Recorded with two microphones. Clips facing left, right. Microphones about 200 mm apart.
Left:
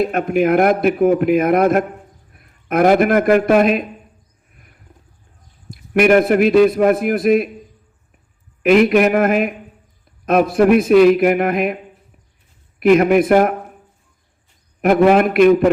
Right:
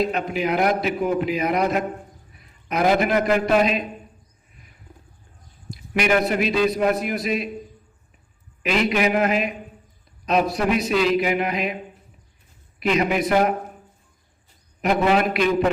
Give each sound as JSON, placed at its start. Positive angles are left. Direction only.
{"t": 0.0, "sound": "a man's voice", "side_deg": 55}
{"t": 4.5, "sound": "wild animals", "side_deg": 55}
{"t": 5.7, "sound": "a man's voice", "side_deg": 55}
{"t": 8.6, "sound": "a man's voice", "side_deg": 55}
{"t": 12.8, "sound": "a man's voice", "side_deg": 55}
{"t": 14.8, "sound": "a man's voice", "side_deg": 50}